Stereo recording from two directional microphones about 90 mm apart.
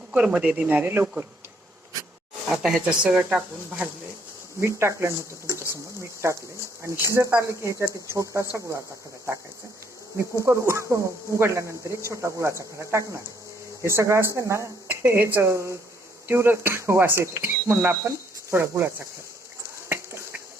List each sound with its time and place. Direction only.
0.1 s speech: 15° right (ahead or behind)
2.5 s speech: 5° right (ahead or behind)
4.6 s speech: 30° right (ahead or behind)
10.2 s speech: 30° right (ahead or behind)
14.8 s speech: 20° right (ahead or behind)